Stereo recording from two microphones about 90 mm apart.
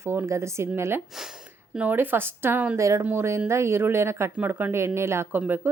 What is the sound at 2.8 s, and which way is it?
Speech, 35° right (ahead or behind).